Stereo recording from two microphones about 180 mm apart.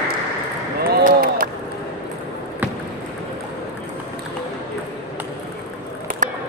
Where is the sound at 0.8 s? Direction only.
55° right (ahead or behind).